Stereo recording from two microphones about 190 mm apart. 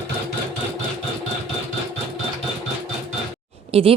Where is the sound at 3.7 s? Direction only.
30° right (ahead or behind).